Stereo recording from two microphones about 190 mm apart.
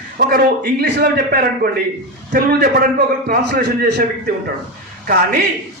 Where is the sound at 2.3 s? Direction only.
50° right (ahead or behind).